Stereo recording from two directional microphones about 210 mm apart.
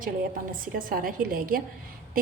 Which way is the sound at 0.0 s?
40° right (ahead or behind).